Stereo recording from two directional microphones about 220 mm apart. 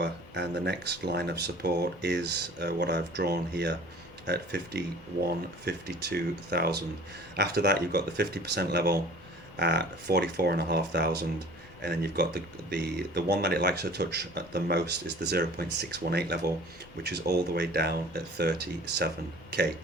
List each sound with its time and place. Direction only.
0.0 s speech: 50° right (ahead or behind)